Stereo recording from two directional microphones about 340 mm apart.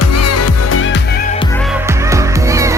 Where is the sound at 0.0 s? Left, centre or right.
Left.